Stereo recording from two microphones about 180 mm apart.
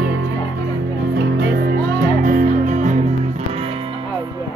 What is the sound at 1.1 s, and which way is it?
Music, 60° right (ahead or behind).